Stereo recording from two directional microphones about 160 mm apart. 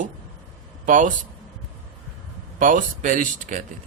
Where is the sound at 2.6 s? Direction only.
55° right (ahead or behind).